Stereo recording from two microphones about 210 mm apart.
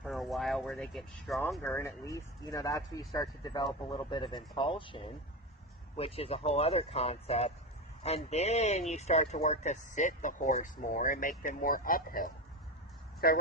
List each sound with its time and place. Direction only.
0.0 s speech: centre (ahead or behind)
1.8 s speech: 15° left (ahead or behind); by 13.4 s 45° left (ahead or behind)